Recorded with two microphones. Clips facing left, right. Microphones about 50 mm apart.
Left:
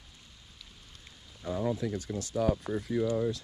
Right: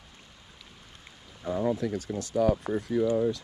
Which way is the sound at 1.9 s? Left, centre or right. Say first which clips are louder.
Right 3 dB; right.